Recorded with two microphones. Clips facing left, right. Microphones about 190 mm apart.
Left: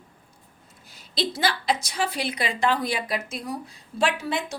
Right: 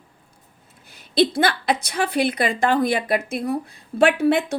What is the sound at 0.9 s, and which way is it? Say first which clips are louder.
A woman's voice: right 10 dB; 55° right (ahead or behind).